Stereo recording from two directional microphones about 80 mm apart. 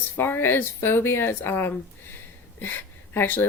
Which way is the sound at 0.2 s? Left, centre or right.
Left.